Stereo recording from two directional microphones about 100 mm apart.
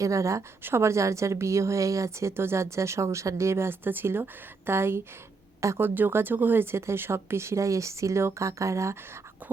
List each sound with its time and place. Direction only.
0.0 s a woman's voice: 30° right (ahead or behind)